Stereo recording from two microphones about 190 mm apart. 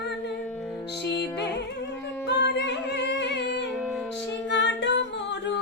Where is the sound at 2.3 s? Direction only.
65° left (ahead or behind).